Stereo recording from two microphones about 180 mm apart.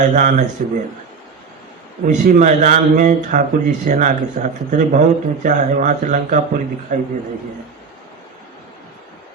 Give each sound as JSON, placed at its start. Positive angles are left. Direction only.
{"t": 0.0, "sound": "speech", "side_deg": -45}
{"t": 2.0, "sound": "speech", "side_deg": -45}